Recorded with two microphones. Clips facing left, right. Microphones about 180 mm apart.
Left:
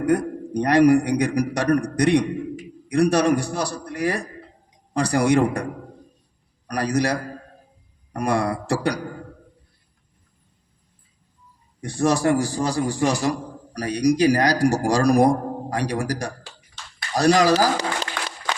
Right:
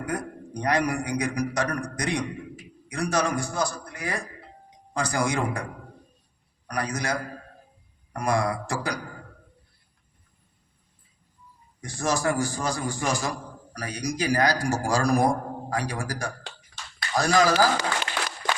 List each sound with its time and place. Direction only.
0.6 s a man's voice: 65° left (ahead or behind)
1.6 s a man's voice: 35° left (ahead or behind)
2.0 s a man's voice: 65° left (ahead or behind)
6.7 s a man's voice: 65° left (ahead or behind)
11.9 s a man's voice: 65° left (ahead or behind)
12.2 s a man's voice: 35° left (ahead or behind)